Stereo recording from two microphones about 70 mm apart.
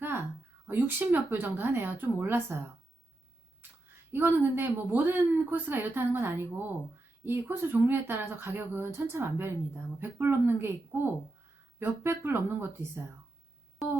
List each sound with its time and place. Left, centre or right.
0.7 s a woman's voice: right
4.1 s a woman's voice: right